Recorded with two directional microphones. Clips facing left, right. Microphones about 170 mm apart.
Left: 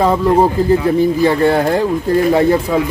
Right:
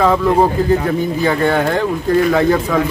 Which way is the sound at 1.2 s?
35° left (ahead or behind).